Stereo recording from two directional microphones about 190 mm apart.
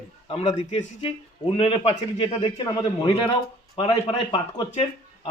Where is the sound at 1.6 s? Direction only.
30° left (ahead or behind).